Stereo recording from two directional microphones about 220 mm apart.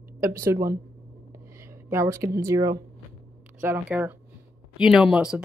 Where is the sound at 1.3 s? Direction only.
10° right (ahead or behind).